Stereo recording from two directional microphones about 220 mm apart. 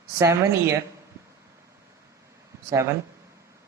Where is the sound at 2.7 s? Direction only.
10° right (ahead or behind).